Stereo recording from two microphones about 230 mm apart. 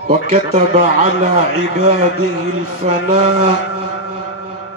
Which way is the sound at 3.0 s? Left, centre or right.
Right.